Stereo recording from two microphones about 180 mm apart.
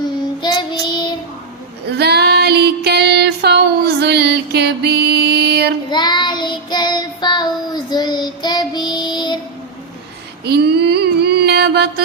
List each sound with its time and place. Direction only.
0.4 s child singing: 25° left (ahead or behind)
1.9 s female singing: 65° right (ahead or behind)
5.9 s child singing: 25° left (ahead or behind)
10.4 s a sound: 65° right (ahead or behind)